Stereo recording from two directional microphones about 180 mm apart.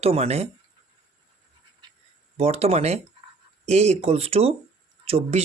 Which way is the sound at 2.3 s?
35° right (ahead or behind).